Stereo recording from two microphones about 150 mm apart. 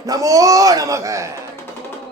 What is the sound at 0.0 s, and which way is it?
A man's voice, 20° right (ahead or behind).